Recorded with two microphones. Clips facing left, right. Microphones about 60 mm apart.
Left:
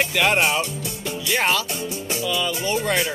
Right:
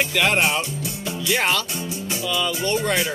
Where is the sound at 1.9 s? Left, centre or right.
Left.